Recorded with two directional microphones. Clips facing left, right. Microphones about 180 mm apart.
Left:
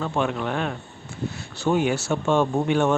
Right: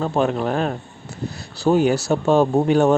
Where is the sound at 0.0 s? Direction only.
40° right (ahead or behind).